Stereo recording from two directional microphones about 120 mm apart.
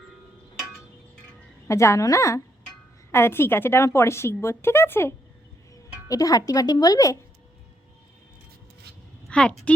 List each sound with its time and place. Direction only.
1.6 s speech: 25° left (ahead or behind)
9.3 s a woman's voice: 10° left (ahead or behind)